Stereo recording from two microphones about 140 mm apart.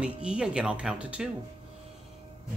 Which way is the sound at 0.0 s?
5° right (ahead or behind).